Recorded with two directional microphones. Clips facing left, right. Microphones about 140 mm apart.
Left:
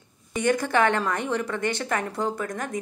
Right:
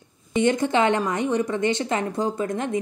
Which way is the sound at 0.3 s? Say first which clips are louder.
Right 3 dB; 25° right (ahead or behind).